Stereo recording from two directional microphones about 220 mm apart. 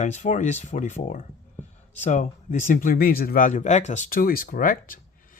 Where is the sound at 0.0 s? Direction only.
35° left (ahead or behind).